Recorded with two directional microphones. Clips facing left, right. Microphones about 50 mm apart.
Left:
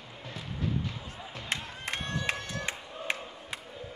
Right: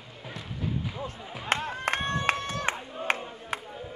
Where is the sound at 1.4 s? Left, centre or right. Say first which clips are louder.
Right 8 dB; right.